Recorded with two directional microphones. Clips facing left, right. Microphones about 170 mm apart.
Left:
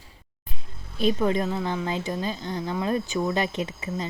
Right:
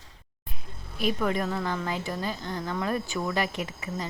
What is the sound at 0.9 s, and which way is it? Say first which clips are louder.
Speech: left 4 dB; 25° left (ahead or behind).